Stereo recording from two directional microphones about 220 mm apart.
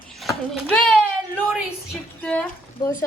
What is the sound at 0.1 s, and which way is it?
Speech, centre (ahead or behind).